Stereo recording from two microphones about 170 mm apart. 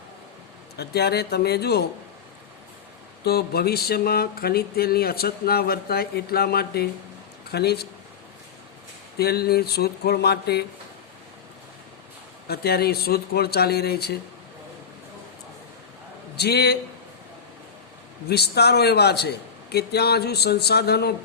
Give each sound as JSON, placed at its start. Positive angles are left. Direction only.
{"t": 0.8, "sound": "a man's voice", "side_deg": 75}
{"t": 3.2, "sound": "a man's voice", "side_deg": 65}
{"t": 9.1, "sound": "a man's voice", "side_deg": 70}
{"t": 12.5, "sound": "a man's voice", "side_deg": 65}
{"t": 16.3, "sound": "a man's voice", "side_deg": 75}
{"t": 18.3, "sound": "a man's voice", "side_deg": 75}